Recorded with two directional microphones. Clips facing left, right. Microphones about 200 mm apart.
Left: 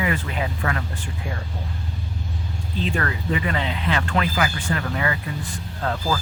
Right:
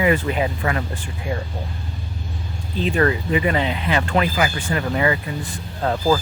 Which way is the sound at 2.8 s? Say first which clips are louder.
Right 7 dB; 20° right (ahead or behind).